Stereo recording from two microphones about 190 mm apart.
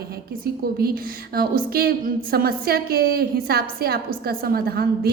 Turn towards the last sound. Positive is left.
turn(degrees=-55)  # may be behind; listen again after turning